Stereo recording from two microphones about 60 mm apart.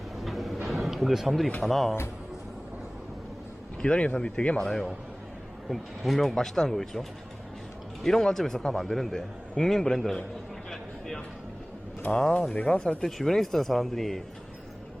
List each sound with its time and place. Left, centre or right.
0.2 s a sound: centre
1.6 s speech: centre
3.8 s a man's voice: centre
8.0 s a man's voice: centre
10.7 s a sound: centre
12.1 s a man's voice: centre